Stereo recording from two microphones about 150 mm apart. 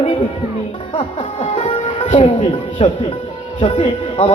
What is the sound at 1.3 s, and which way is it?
Speech, 45° left (ahead or behind).